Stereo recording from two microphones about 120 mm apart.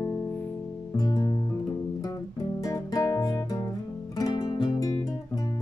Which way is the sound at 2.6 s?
30° left (ahead or behind).